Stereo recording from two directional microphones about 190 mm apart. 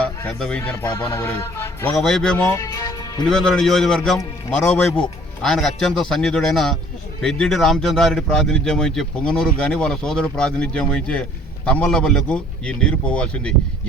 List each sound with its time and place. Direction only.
0.0 s speech: 5° left (ahead or behind)
1.1 s music: 15° left (ahead or behind)
2.0 s speech: centre (ahead or behind)
2.5 s speech: 15° left (ahead or behind)
3.2 s speech: 5° left (ahead or behind)